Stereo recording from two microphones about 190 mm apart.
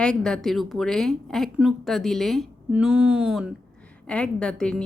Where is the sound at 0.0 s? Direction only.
5° left (ahead or behind).